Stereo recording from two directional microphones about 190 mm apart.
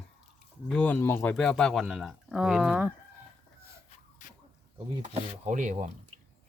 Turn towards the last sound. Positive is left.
turn(degrees=-40)  # may be behind; listen again after turning